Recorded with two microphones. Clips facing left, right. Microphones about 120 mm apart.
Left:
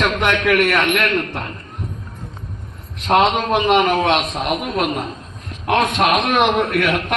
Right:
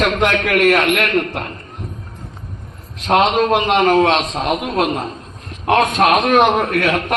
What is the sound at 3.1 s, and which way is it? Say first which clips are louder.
A man's voice: right 2 dB; 35° right (ahead or behind).